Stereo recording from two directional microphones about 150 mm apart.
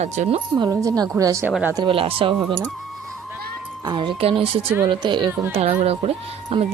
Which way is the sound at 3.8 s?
30° right (ahead or behind).